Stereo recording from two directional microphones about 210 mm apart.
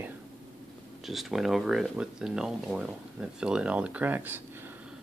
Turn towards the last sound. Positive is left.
turn(degrees=-10)  # may be behind; listen again after turning